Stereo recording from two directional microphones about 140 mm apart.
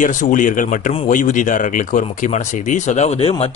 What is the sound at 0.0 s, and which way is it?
Speech, 65° left (ahead or behind).